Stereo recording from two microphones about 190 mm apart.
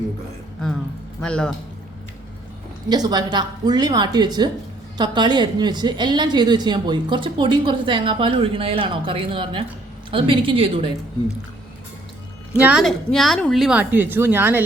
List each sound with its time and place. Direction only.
1.2 s a woman's voice: 5° left (ahead or behind)
2.9 s speech: 20° right (ahead or behind)
12.5 s a woman's voice: 5° right (ahead or behind)